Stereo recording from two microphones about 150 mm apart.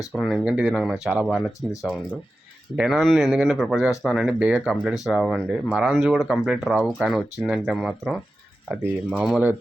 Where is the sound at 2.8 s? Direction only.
Centre (ahead or behind).